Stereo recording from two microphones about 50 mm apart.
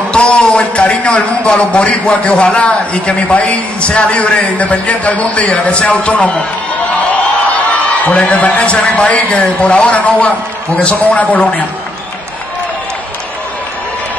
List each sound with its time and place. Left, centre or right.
0.1 s a man's voice: left
8.0 s a man's voice: left